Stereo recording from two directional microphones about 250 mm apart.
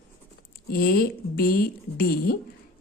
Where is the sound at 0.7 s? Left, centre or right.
Left.